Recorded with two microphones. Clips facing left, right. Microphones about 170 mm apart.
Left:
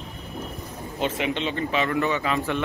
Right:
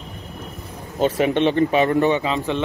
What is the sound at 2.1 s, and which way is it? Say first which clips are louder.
Speech: right 3 dB; 20° right (ahead or behind).